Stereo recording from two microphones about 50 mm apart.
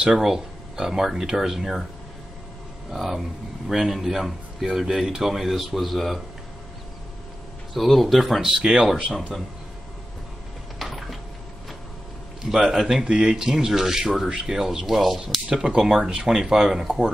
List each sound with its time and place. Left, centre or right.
0.1 s speech: centre
2.9 s a man's voice: centre
7.7 s a man's voice: centre
10.8 s a sound: centre
12.4 s speech: centre
13.0 s speech: centre
15.5 s speech: centre